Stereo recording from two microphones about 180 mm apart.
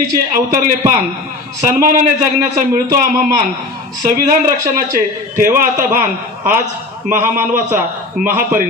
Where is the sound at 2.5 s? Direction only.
50° right (ahead or behind).